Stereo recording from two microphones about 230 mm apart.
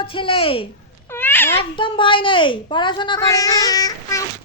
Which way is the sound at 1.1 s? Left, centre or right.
Centre.